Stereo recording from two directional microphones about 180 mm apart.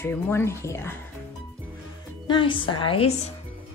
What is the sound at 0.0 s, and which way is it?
Speech, 15° left (ahead or behind).